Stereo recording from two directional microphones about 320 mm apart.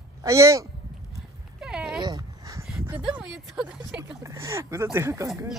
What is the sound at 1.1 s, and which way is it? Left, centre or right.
Dog, centre.